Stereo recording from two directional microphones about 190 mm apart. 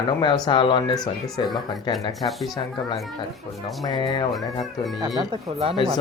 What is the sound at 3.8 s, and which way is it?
Speech, 20° left (ahead or behind).